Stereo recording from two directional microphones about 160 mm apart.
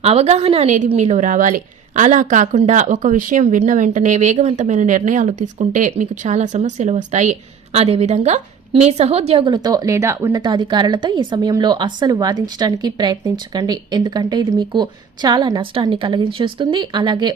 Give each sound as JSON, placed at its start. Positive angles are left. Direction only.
{"t": 0.0, "sound": "a woman's voice", "side_deg": -40}